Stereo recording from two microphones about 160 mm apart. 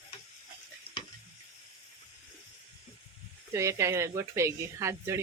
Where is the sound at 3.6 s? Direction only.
20° right (ahead or behind).